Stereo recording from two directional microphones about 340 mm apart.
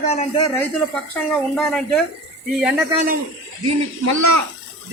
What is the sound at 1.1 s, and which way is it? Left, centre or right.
Speech, centre.